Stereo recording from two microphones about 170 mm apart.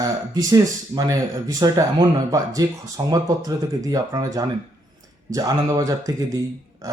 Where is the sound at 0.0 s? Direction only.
20° right (ahead or behind).